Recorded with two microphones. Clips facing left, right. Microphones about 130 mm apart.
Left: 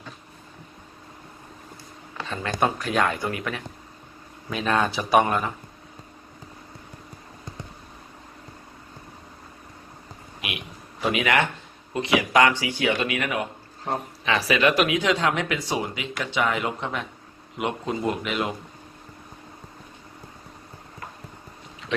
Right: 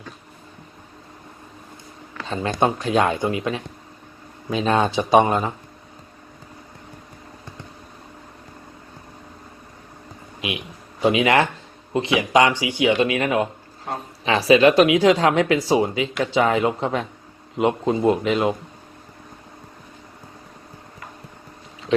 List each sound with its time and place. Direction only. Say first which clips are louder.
2.2 s speech: right 4 dB; 30° right (ahead or behind)
11.0 s speech: right 5 dB; 25° right (ahead or behind)
13.0 s speech: right 7 dB; 25° right (ahead or behind)